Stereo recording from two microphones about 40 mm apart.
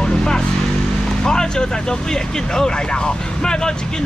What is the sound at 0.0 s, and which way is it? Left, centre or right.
Vehicle, centre.